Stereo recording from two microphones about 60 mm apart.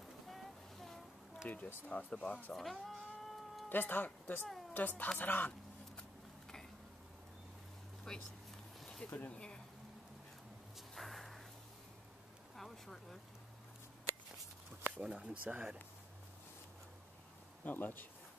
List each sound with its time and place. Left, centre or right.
0.0 s vehicle: centre
1.5 s speech: left
2.5 s cat: centre
3.6 s speech: left
8.1 s speech: centre
9.0 s speech: left
11.0 s a sound: centre
12.5 s a sound: centre
15.0 s speech: centre
17.6 s speech: left